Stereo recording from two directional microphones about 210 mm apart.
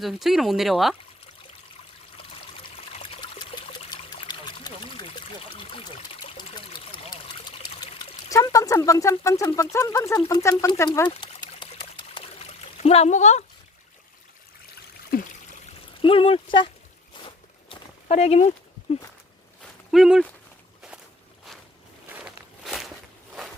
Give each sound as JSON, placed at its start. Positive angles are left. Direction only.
{"t": 0.0, "sound": "speech", "side_deg": 0}
{"t": 3.0, "sound": "trickle", "side_deg": 25}
{"t": 8.3, "sound": "speech", "side_deg": 15}
{"t": 11.1, "sound": "trickle", "side_deg": 25}
{"t": 15.1, "sound": "trickle", "side_deg": 45}
{"t": 16.0, "sound": "speech", "side_deg": 25}
{"t": 17.2, "sound": "walk", "side_deg": 25}
{"t": 19.9, "sound": "speech", "side_deg": 0}
{"t": 22.2, "sound": "walk", "side_deg": 0}